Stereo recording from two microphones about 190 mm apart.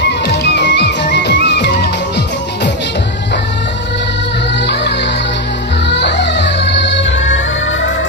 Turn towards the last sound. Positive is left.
turn(degrees=65)  # may be behind; listen again after turning